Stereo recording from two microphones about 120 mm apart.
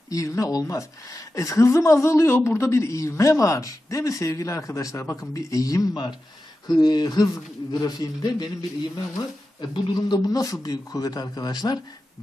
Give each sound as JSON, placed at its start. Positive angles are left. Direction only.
{"t": 0.1, "sound": "speech", "side_deg": 25}